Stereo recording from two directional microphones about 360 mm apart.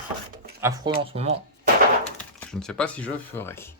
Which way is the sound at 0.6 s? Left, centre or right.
Centre.